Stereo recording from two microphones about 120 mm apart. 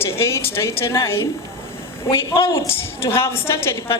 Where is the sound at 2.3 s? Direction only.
25° left (ahead or behind).